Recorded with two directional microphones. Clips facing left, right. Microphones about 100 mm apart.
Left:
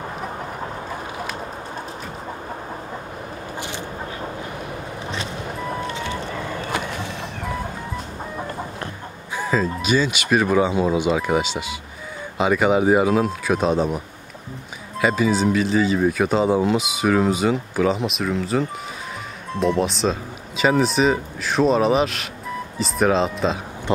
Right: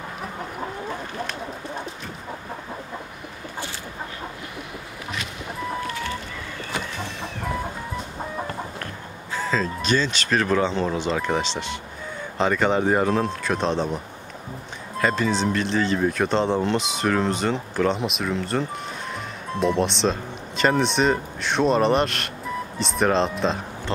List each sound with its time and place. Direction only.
9.3 s speech: 10° left (ahead or behind)